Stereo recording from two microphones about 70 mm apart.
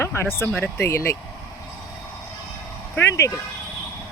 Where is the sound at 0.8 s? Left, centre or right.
Left.